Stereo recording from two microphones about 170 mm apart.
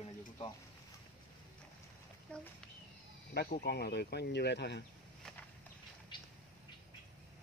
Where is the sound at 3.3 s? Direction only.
65° left (ahead or behind); by 4.8 s 90° left.